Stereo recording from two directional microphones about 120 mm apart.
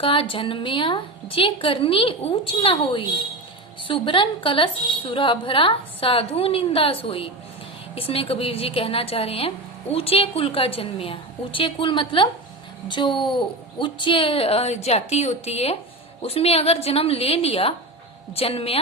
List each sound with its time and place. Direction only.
0.0 s a woman's voice: 50° left (ahead or behind)